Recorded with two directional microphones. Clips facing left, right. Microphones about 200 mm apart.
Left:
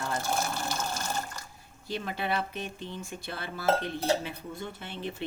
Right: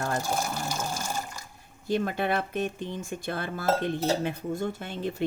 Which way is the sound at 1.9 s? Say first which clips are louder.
Right 6 dB; 50° right (ahead or behind).